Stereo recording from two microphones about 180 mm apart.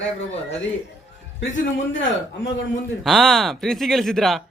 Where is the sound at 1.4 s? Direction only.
90° left.